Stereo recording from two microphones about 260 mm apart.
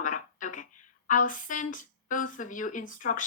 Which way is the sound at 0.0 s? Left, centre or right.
Left.